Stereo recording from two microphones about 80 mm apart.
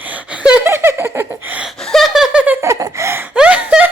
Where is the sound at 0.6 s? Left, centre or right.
Right.